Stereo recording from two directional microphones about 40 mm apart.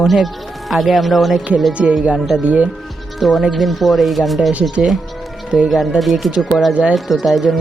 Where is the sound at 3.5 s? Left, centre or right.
Centre.